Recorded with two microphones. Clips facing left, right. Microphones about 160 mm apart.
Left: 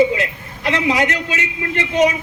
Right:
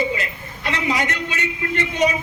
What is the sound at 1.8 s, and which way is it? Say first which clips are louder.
Speech: left 5 dB; 90° left.